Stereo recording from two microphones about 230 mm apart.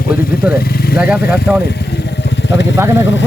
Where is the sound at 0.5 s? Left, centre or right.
Left.